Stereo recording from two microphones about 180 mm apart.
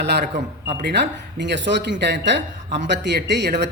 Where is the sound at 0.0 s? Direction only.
65° right (ahead or behind).